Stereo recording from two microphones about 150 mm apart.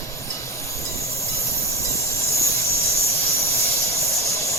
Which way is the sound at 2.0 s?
20° left (ahead or behind).